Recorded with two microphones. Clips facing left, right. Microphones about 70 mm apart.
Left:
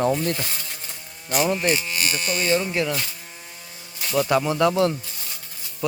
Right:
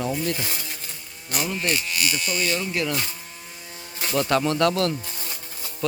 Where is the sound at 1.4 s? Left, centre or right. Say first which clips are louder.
Left 4 dB; left.